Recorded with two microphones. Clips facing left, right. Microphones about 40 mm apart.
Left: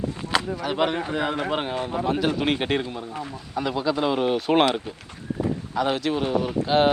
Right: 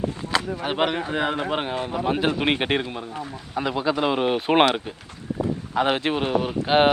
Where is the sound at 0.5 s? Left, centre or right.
Right.